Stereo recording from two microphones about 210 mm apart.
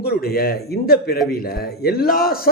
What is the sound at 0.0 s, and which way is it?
A man's voice, 45° left (ahead or behind).